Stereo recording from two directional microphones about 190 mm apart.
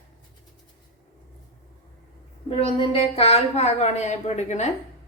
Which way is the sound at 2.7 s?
30° left (ahead or behind).